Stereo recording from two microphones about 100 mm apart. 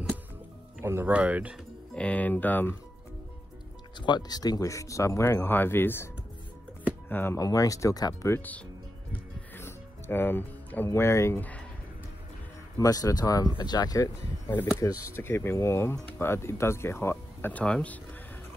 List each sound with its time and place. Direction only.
0.7 s speech: 20° right (ahead or behind)
2.0 s speech: 15° left (ahead or behind)
4.0 s speech: 45° left (ahead or behind); by 6.0 s 25° left (ahead or behind)
7.1 s speech: 20° left (ahead or behind)
7.3 s speech: 35° left (ahead or behind)
8.3 s speech: 20° left (ahead or behind)
9.6 s music: 25° left (ahead or behind)
12.7 s speech: 35° left (ahead or behind)
15.1 s speech: 25° left (ahead or behind)